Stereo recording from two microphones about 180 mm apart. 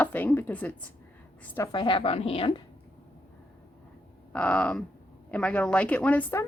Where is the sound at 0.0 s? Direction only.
10° left (ahead or behind).